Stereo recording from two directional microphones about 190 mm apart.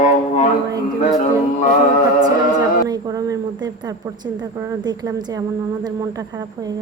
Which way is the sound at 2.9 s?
20° right (ahead or behind).